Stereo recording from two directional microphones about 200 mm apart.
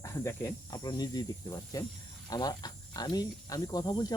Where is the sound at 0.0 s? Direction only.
15° left (ahead or behind).